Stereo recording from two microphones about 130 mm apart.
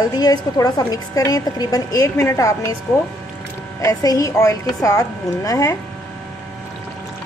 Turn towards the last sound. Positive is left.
turn(degrees=25)  # may be behind; listen again after turning